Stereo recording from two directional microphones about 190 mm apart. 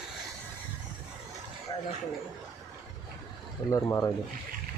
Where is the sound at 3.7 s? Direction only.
15° left (ahead or behind).